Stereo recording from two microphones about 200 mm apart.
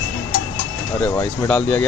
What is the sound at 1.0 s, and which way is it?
Speech, 5° left (ahead or behind).